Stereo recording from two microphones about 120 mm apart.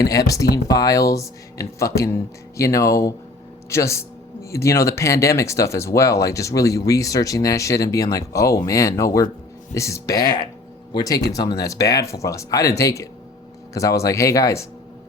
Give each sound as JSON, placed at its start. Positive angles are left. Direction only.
{"t": 0.0, "sound": "speech", "side_deg": 30}